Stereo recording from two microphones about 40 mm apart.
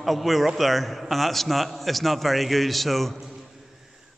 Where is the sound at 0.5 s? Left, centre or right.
Centre.